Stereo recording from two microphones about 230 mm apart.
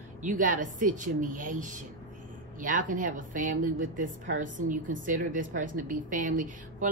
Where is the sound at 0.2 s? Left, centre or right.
Right.